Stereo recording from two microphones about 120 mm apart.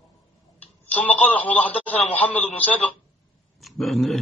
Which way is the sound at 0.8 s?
10° left (ahead or behind).